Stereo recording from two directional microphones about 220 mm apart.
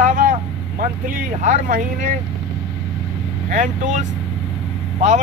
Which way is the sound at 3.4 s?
35° right (ahead or behind).